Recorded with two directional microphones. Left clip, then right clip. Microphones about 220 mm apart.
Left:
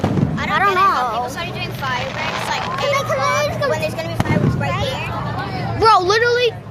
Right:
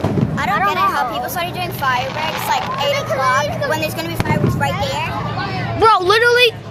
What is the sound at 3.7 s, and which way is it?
Speech, 40° right (ahead or behind).